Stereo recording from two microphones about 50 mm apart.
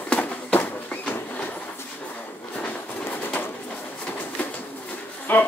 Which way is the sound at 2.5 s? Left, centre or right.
Left.